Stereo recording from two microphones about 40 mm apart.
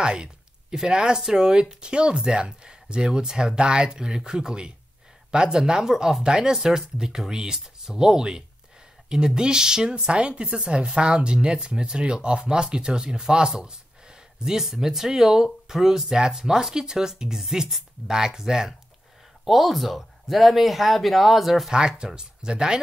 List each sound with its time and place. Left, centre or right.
0.0 s a sound: right
0.8 s speech: centre
21.7 s speech: right